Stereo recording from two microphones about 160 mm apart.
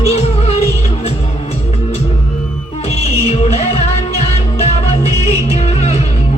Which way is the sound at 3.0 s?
40° left (ahead or behind).